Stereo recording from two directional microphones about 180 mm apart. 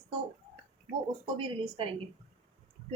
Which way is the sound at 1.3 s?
30° right (ahead or behind).